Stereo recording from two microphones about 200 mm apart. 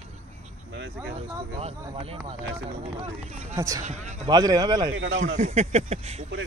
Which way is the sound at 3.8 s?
35° right (ahead or behind).